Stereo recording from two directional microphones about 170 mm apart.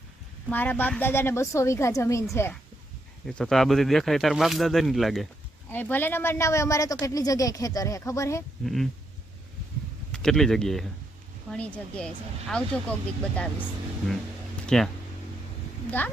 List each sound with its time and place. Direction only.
0.5 s speech: 10° left (ahead or behind)
3.2 s speech: 5° left (ahead or behind)
5.7 s a woman's voice: 10° left (ahead or behind)
8.6 s speech: centre (ahead or behind)
10.1 s speech: 5° left (ahead or behind)
14.7 s speech: 5° left (ahead or behind)
15.9 s speech: 10° left (ahead or behind)